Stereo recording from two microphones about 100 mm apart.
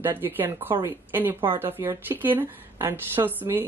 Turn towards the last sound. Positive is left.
turn(degrees=-20)  # may be behind; listen again after turning